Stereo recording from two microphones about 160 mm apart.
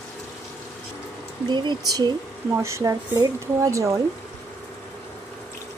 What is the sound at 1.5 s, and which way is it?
Speech, 25° right (ahead or behind).